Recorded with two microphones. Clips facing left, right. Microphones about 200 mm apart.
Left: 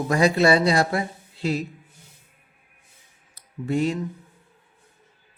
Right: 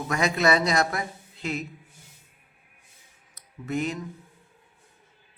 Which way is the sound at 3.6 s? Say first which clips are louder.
Left 5 dB; 30° left (ahead or behind).